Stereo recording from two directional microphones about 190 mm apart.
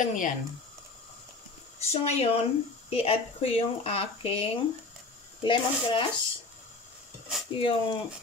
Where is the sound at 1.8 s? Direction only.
35° left (ahead or behind).